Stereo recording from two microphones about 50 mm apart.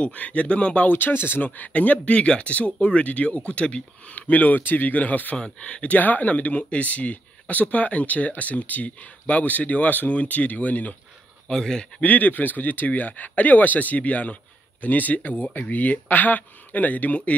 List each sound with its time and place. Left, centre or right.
0.0 s speech: left
0.9 s speech: left
1.4 s speech: left
11.4 s speech: centre
12.0 s speech: left